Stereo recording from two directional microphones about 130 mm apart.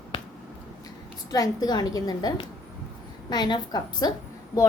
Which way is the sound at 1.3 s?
30° left (ahead or behind).